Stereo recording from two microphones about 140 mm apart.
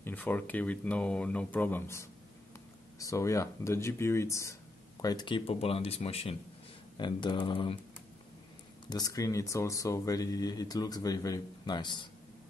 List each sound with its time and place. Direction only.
0.0 s speech: 10° left (ahead or behind)
5.0 s speech: 30° left (ahead or behind)
7.0 s speech: 35° left (ahead or behind)
8.8 s speech: 25° left (ahead or behind)